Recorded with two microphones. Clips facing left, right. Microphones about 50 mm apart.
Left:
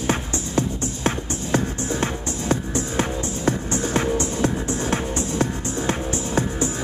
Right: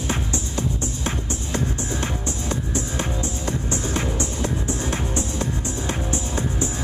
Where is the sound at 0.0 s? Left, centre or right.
Left.